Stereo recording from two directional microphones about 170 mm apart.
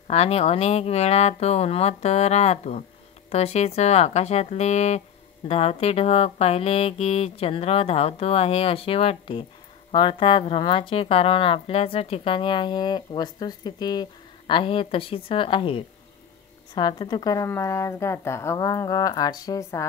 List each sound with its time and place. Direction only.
0.1 s speech: 35° left (ahead or behind); by 19.9 s 20° left (ahead or behind)